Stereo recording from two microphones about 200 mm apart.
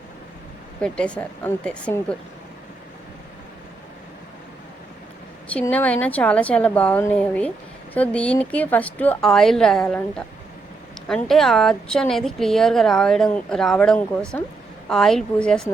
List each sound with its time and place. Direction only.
0.8 s a woman's voice: 5° left (ahead or behind)
5.5 s a woman's voice: 5° left (ahead or behind)